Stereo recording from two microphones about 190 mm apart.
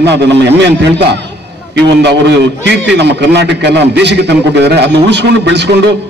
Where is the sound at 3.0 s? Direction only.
65° right (ahead or behind).